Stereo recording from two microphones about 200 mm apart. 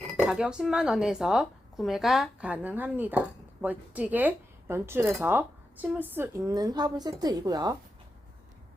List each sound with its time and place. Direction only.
0.2 s a woman's voice: centre (ahead or behind); by 7.8 s 20° right (ahead or behind)